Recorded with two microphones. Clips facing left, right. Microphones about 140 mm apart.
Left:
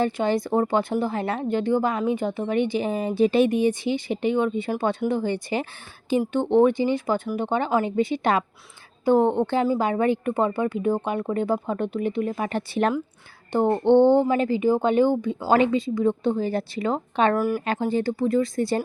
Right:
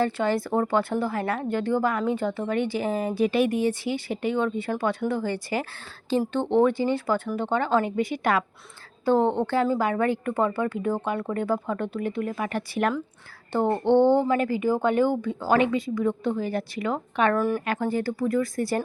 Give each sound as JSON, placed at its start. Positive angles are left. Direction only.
{"t": 0.0, "sound": "a woman's voice", "side_deg": 20}
{"t": 13.5, "sound": "a woman's voice", "side_deg": 15}
{"t": 15.4, "sound": "a woman's voice", "side_deg": 30}
{"t": 17.3, "sound": "speech", "side_deg": 5}
{"t": 17.7, "sound": "a woman's voice", "side_deg": 20}